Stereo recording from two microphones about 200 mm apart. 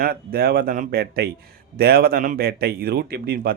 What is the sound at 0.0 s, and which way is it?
Speech, 50° right (ahead or behind).